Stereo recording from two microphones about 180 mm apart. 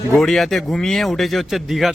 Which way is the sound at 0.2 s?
Centre (ahead or behind).